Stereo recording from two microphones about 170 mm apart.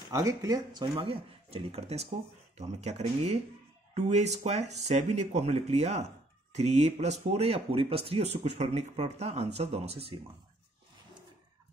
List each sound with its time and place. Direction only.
0.1 s speech: 20° right (ahead or behind)